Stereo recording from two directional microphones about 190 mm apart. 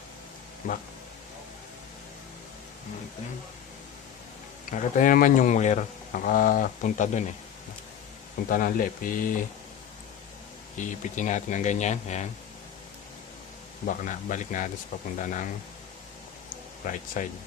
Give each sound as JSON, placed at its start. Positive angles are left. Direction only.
{"t": 0.6, "sound": "speech", "side_deg": 45}
{"t": 4.6, "sound": "speech", "side_deg": 45}
{"t": 8.5, "sound": "speech", "side_deg": 50}
{"t": 10.8, "sound": "speech", "side_deg": 40}
{"t": 13.8, "sound": "speech", "side_deg": 45}
{"t": 16.8, "sound": "speech", "side_deg": 45}